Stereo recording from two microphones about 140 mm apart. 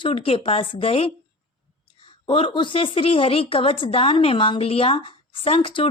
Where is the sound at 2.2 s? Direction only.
40° left (ahead or behind).